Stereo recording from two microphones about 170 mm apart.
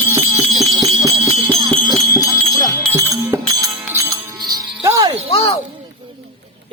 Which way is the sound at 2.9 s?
15° right (ahead or behind).